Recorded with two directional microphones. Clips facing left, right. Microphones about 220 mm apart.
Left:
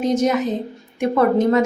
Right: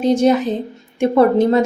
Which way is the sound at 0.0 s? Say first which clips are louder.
Right 4 dB; 30° right (ahead or behind).